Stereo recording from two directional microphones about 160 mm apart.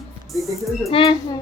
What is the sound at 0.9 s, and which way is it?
Speech, 35° left (ahead or behind).